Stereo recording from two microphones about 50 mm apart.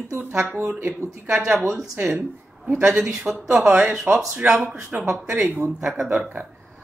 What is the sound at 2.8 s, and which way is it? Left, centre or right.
Speech, centre.